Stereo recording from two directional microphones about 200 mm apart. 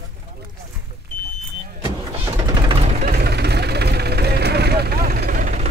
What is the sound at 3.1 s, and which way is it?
Vehicle, 55° right (ahead or behind).